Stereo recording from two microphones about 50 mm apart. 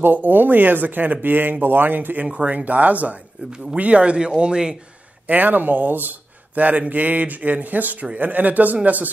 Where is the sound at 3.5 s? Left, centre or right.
Centre.